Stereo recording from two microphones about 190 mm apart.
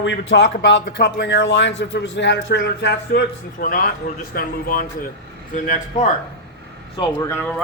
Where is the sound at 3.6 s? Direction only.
45° left (ahead or behind).